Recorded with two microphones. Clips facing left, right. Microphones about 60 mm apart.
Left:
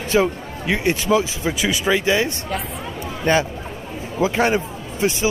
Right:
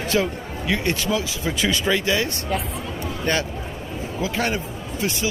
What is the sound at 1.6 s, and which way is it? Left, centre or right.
A man's voice, centre.